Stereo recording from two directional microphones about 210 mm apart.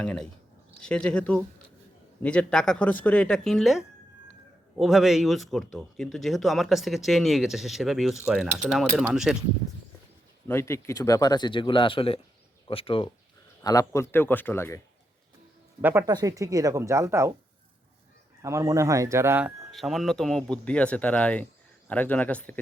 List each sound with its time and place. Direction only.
0.0 s speech: 5° left (ahead or behind)
10.5 s speech: 10° left (ahead or behind)
13.6 s speech: 15° left (ahead or behind)
15.8 s speech: 10° right (ahead or behind)
18.4 s speech: 15° right (ahead or behind); by 22.6 s 5° left (ahead or behind)